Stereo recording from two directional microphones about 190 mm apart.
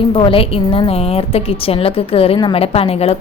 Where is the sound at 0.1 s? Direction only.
30° left (ahead or behind).